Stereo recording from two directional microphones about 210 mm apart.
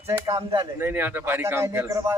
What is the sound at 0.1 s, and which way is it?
Speech, 15° right (ahead or behind).